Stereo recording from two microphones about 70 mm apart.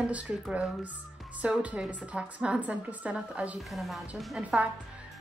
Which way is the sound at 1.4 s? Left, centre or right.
Centre.